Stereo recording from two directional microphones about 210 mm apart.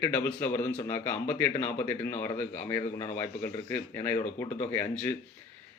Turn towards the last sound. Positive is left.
turn(degrees=10)  # may be behind; listen again after turning